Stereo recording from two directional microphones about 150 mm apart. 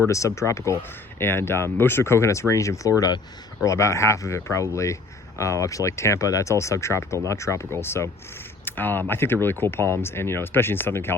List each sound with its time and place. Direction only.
0.1 s speech: 20° left (ahead or behind)